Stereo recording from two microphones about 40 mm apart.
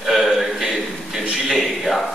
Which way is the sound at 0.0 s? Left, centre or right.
Centre.